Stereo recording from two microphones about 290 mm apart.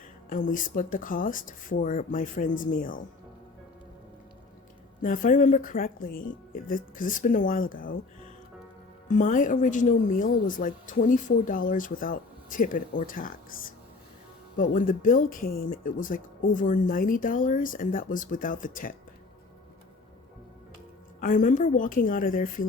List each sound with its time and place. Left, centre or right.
0.3 s speech: left
5.0 s speech: left
9.0 s speech: left
21.2 s speech: left